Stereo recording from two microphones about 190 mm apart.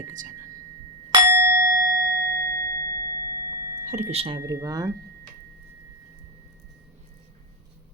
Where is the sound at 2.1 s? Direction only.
55° right (ahead or behind).